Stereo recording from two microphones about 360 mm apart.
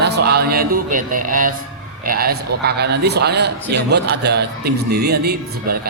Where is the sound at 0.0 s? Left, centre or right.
Right.